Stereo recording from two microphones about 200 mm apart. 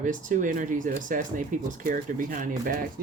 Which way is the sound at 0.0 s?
40° right (ahead or behind).